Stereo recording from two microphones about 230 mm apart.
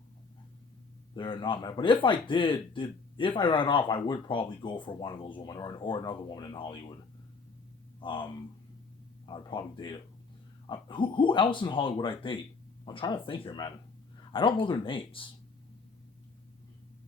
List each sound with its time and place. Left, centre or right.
1.1 s speech: left
8.0 s speech: left